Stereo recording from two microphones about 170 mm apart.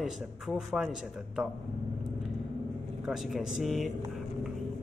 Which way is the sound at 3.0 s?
Centre (ahead or behind).